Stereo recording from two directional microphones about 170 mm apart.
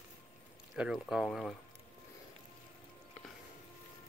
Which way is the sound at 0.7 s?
Centre (ahead or behind).